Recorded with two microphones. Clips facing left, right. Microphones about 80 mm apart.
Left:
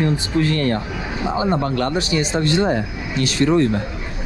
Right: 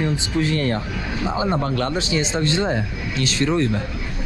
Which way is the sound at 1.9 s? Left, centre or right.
Right.